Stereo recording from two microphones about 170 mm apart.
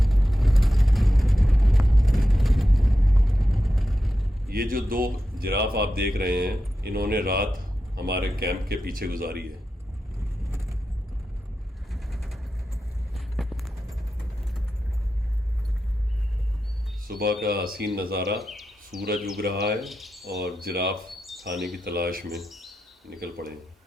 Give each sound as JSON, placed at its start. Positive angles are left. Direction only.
{"t": 0.0, "sound": "vehicle", "side_deg": 0}
{"t": 4.4, "sound": "a man's voice", "side_deg": -60}
{"t": 11.9, "sound": "mechanisms", "side_deg": 0}
{"t": 13.1, "sound": "clip-clop", "side_deg": 0}
{"t": 17.1, "sound": "music", "side_deg": -60}
{"t": 17.4, "sound": "speech", "side_deg": -65}
{"t": 18.3, "sound": "a sound", "side_deg": 0}
{"t": 19.8, "sound": "speech", "side_deg": 0}
{"t": 20.4, "sound": "a man's voice", "side_deg": -65}
{"t": 21.1, "sound": "bird", "side_deg": 0}
{"t": 21.8, "sound": "a man's voice", "side_deg": -65}
{"t": 22.3, "sound": "speech", "side_deg": 0}
{"t": 23.0, "sound": "a man's voice", "side_deg": -65}